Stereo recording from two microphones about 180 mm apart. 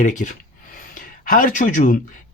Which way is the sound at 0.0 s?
45° left (ahead or behind).